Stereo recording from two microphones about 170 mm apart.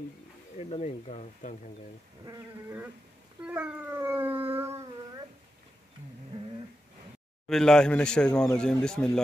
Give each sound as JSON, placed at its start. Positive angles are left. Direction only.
{"t": 0.6, "sound": "speech", "side_deg": 40}
{"t": 2.2, "sound": "howl", "side_deg": -15}
{"t": 4.6, "sound": "dog", "side_deg": -15}
{"t": 7.4, "sound": "speech", "side_deg": 5}